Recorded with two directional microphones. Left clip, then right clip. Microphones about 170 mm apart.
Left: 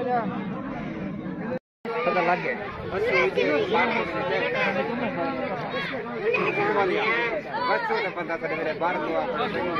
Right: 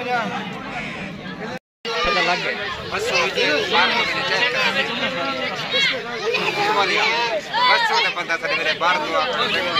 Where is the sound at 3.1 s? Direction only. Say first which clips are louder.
Right 4 dB; 25° left (ahead or behind).